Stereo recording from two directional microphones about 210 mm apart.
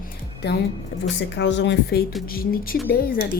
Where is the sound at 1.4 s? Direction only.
55° left (ahead or behind).